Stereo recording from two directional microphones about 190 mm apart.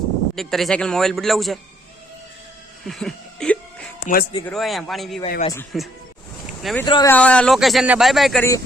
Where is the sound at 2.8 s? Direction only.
Centre (ahead or behind).